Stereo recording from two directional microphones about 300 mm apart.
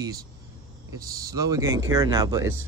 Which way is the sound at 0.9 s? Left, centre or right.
Centre.